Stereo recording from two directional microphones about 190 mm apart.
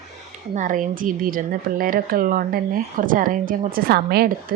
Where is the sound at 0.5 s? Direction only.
45° right (ahead or behind).